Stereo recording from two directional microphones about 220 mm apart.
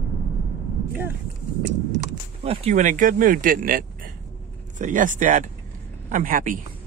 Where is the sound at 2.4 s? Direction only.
30° right (ahead or behind).